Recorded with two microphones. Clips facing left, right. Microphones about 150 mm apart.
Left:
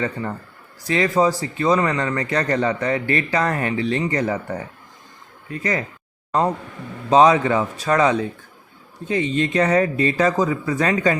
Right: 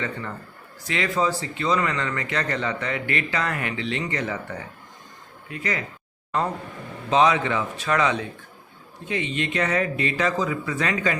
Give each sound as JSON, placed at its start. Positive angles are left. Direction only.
{"t": 0.0, "sound": "speech", "side_deg": 40}
{"t": 7.1, "sound": "speech", "side_deg": 35}